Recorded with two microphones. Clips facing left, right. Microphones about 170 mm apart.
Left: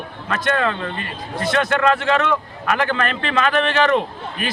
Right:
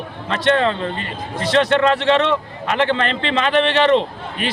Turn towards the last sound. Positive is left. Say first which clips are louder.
# right 1 dB
turn(degrees=-25)  # may be behind; listen again after turning